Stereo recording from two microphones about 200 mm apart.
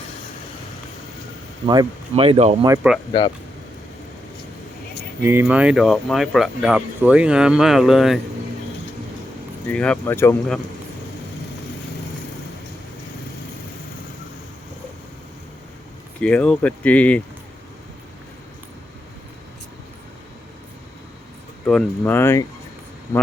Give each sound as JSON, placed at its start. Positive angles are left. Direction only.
{"t": 1.6, "sound": "speech", "side_deg": -20}
{"t": 3.1, "sound": "speech", "side_deg": 25}
{"t": 5.2, "sound": "speech", "side_deg": -10}
{"t": 9.6, "sound": "speech", "side_deg": 5}
{"t": 16.2, "sound": "speech", "side_deg": 5}
{"t": 21.7, "sound": "speech", "side_deg": 5}